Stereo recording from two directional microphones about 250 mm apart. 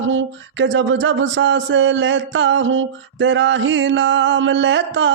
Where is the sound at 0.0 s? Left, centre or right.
Right.